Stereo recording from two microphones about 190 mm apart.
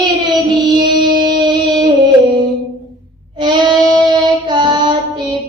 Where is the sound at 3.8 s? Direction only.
25° right (ahead or behind).